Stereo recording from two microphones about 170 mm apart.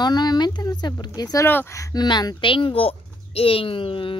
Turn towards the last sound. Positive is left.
turn(degrees=30)  # may be behind; listen again after turning